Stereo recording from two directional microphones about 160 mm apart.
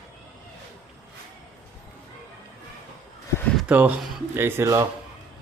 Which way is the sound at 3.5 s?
10° right (ahead or behind).